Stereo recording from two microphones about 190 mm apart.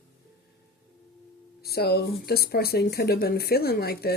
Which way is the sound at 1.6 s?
55° left (ahead or behind).